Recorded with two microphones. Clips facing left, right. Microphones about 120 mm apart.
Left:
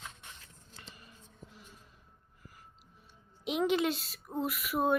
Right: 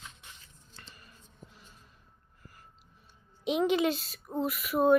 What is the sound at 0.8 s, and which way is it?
Music, 20° left (ahead or behind).